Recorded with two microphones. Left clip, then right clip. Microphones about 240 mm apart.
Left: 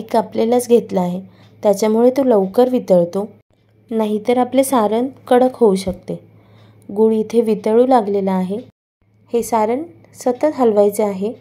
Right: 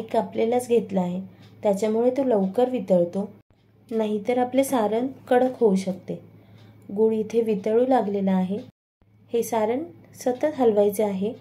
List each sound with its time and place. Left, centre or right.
0.1 s a woman's voice: left